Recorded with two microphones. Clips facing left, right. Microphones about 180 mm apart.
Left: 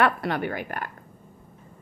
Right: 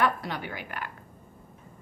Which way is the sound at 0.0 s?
60° left (ahead or behind).